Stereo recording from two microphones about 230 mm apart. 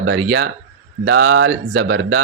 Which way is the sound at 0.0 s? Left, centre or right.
Right.